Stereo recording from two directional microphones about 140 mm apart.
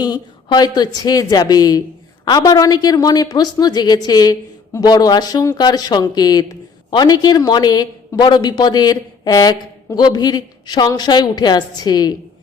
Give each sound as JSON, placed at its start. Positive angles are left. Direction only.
{"t": 0.0, "sound": "speech", "side_deg": 30}